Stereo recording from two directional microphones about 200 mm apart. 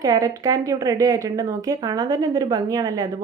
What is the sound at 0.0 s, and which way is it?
A woman's voice, 15° right (ahead or behind).